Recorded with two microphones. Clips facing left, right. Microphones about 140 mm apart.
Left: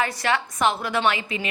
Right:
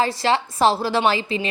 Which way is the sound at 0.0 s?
30° right (ahead or behind).